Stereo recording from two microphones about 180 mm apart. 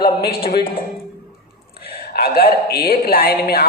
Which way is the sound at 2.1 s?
60° left (ahead or behind).